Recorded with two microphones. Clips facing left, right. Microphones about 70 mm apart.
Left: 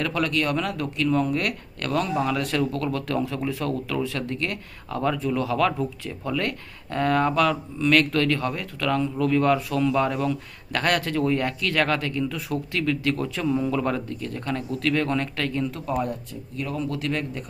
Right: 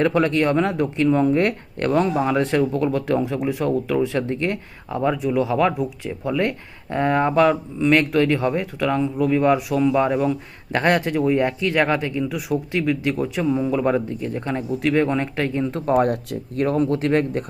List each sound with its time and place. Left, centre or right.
0.0 s speech: right
15.9 s speech: right
16.6 s speech: right